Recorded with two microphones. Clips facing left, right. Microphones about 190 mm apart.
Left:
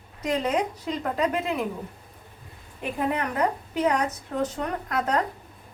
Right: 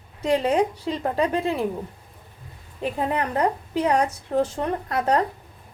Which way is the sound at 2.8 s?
30° right (ahead or behind).